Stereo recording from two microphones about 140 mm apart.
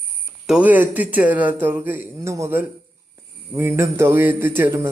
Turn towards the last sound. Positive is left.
turn(degrees=-15)  # may be behind; listen again after turning